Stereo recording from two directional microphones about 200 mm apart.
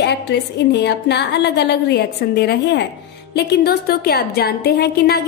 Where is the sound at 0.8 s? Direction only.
55° left (ahead or behind).